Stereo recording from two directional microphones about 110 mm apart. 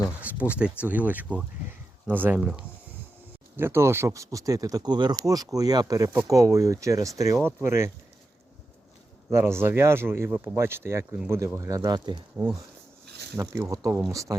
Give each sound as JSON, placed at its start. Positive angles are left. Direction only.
{"t": 0.2, "sound": "speech", "side_deg": -15}
{"t": 3.6, "sound": "speech", "side_deg": -20}
{"t": 9.3, "sound": "speech", "side_deg": -25}
{"t": 13.3, "sound": "speech", "side_deg": -25}